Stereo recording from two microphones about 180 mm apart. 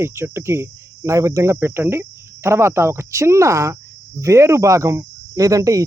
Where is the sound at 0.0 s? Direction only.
15° right (ahead or behind).